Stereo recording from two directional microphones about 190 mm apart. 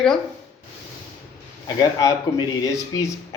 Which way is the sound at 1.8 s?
20° left (ahead or behind).